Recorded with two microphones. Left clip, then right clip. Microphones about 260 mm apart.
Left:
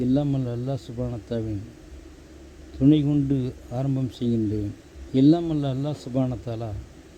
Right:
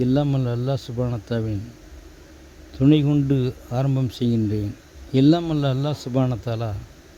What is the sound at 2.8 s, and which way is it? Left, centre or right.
Speech, right.